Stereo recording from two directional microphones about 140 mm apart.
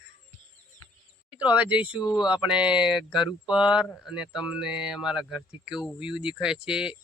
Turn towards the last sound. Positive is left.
turn(degrees=-5)  # may be behind; listen again after turning